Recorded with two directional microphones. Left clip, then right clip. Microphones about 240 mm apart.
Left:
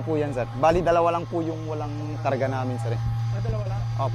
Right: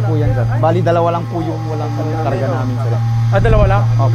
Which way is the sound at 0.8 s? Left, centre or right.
Centre.